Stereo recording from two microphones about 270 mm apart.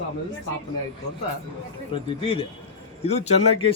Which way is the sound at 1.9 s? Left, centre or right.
Centre.